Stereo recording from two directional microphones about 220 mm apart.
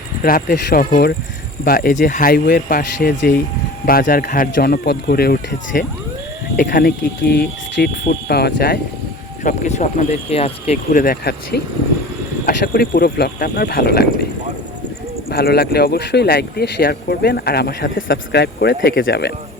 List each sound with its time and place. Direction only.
0.2 s speech: 40° left (ahead or behind)
9.4 s speech: 35° left (ahead or behind)
11.0 s speech: 45° left (ahead or behind)
15.3 s speech: 45° left (ahead or behind)